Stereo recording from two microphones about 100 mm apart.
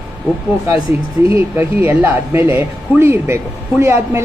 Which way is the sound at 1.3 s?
25° right (ahead or behind).